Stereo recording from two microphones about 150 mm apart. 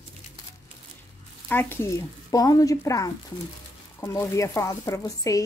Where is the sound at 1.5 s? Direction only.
15° left (ahead or behind).